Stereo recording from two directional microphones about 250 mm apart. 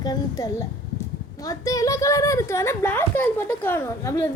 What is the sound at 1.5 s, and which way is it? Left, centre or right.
A child's voice, centre.